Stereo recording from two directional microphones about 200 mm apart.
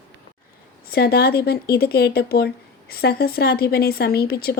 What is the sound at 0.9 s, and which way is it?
Speech, 50° left (ahead or behind).